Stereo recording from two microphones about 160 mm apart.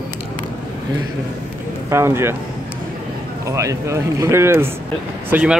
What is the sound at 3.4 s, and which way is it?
Speech, 20° right (ahead or behind).